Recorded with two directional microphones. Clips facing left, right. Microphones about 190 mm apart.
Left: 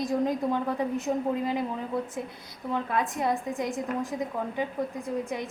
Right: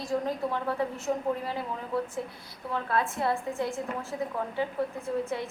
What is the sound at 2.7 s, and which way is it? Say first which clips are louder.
A woman's voice: even; 15° left (ahead or behind).